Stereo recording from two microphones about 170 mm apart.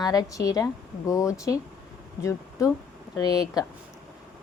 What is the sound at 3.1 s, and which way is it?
Speech, 20° left (ahead or behind).